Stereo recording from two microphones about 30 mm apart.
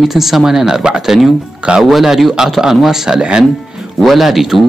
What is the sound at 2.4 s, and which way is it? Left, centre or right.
Speech, centre.